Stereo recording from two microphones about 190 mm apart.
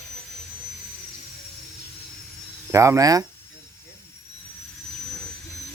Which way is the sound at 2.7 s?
15° right (ahead or behind).